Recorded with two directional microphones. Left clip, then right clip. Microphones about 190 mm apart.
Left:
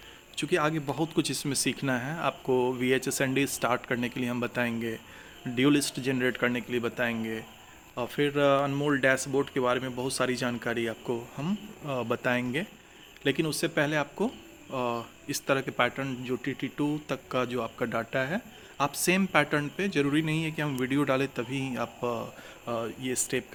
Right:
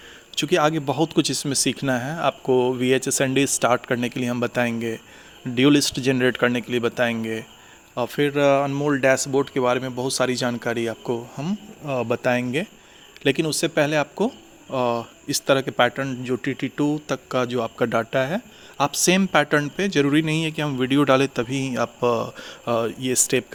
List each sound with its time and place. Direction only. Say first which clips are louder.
0.3 s speech: right 8 dB; 40° right (ahead or behind)